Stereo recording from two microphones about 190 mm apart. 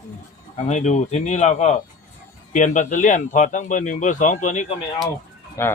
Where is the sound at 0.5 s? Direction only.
40° left (ahead or behind).